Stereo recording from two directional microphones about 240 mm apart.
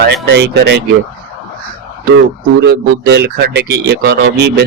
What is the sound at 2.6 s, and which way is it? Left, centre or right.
Speech, right.